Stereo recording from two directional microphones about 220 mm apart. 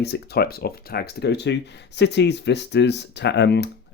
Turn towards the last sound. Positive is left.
turn(degrees=50)  # may be behind; listen again after turning